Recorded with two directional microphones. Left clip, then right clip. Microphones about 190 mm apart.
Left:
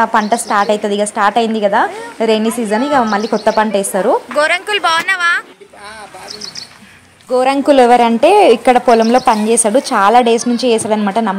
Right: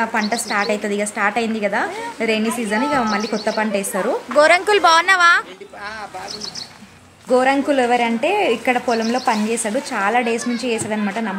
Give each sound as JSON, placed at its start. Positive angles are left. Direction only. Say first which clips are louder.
{"t": 0.0, "sound": "a woman's voice", "louder": "left 8 dB", "side_deg": 20}
{"t": 4.4, "sound": "speech", "louder": "right 1 dB", "side_deg": -10}
{"t": 7.2, "sound": "a woman's voice", "louder": "left 4 dB", "side_deg": 35}